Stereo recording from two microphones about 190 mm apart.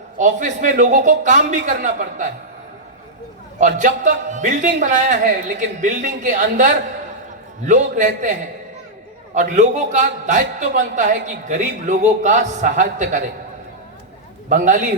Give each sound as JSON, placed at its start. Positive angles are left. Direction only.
{"t": 0.2, "sound": "a man's voice", "side_deg": -40}
{"t": 3.8, "sound": "a man's voice", "side_deg": -40}
{"t": 14.5, "sound": "a man's voice", "side_deg": -40}